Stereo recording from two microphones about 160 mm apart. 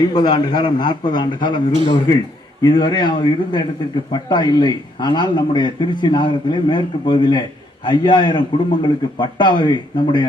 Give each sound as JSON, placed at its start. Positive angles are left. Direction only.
{"t": 0.0, "sound": "a man's voice", "side_deg": 25}